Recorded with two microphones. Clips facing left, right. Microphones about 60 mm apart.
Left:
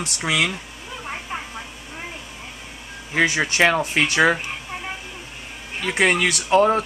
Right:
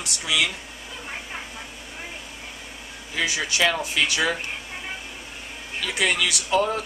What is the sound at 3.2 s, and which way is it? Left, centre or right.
Speech, left.